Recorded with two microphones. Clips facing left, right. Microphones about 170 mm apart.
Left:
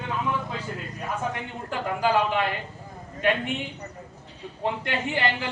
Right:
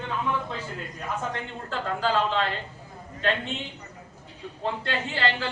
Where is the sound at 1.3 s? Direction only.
15° left (ahead or behind).